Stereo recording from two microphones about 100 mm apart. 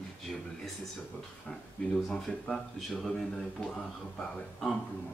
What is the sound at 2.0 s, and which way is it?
Speech, 5° left (ahead or behind).